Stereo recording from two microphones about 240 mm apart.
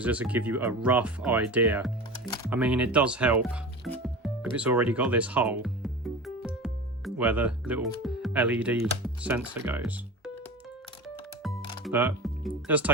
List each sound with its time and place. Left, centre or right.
0.0 s speech: centre
3.8 s music: centre
8.0 s speech: centre
11.9 s speech: centre